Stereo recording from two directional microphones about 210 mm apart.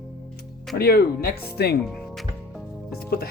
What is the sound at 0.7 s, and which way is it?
Speech, 45° left (ahead or behind).